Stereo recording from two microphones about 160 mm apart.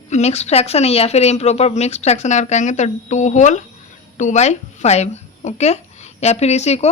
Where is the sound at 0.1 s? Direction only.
45° left (ahead or behind).